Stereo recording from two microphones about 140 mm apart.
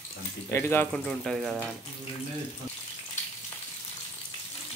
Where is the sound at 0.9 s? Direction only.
Centre (ahead or behind).